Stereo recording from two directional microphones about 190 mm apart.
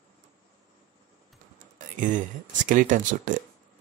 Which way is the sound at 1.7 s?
40° right (ahead or behind).